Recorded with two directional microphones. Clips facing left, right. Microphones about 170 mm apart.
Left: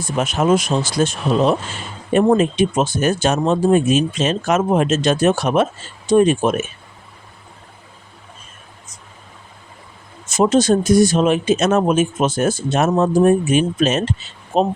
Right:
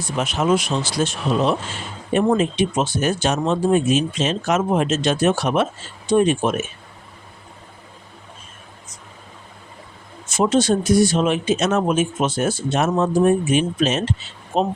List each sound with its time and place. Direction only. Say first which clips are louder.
0.0 s speech: left 3 dB; 50° left (ahead or behind)
10.3 s speech: left 3 dB; 40° left (ahead or behind)